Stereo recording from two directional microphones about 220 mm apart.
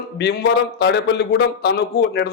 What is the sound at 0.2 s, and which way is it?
Speech, 50° left (ahead or behind).